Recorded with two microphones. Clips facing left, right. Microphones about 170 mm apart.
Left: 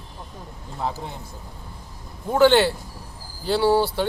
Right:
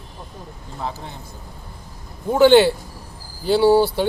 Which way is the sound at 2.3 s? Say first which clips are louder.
Right 4 dB; 5° right (ahead or behind).